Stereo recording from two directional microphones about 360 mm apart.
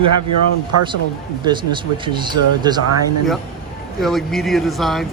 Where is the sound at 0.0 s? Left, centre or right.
Right.